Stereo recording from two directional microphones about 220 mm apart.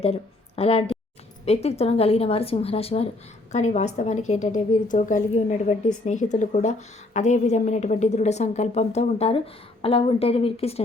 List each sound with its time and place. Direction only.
0.0 s a woman's voice: 25° left (ahead or behind)